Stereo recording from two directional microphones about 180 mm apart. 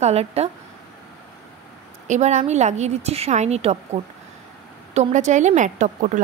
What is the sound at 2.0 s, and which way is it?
A woman's voice, 40° right (ahead or behind).